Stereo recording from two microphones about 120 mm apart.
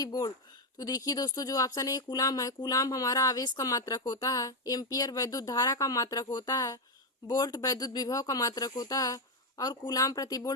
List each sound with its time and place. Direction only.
0.0 s speech: 30° left (ahead or behind)